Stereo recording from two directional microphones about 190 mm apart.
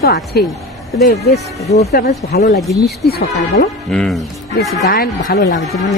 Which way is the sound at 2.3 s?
55° left (ahead or behind).